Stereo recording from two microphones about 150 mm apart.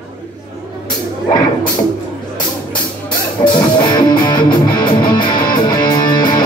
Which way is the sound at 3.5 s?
30° left (ahead or behind).